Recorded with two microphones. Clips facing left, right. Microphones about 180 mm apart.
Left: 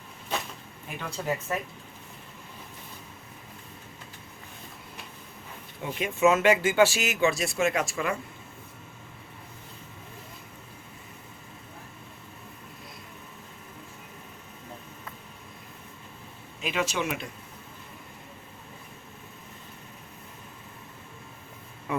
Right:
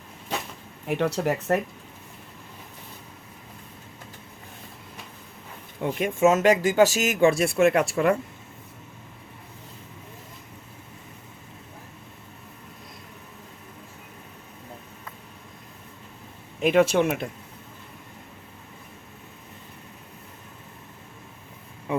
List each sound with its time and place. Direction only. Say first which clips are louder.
0.9 s speech: right 8 dB; 75° right (ahead or behind)
5.8 s speech: right 3 dB; 50° right (ahead or behind)
16.6 s speech: right 10 dB; 55° right (ahead or behind)